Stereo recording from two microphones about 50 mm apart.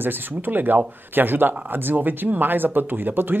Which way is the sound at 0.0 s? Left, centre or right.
Right.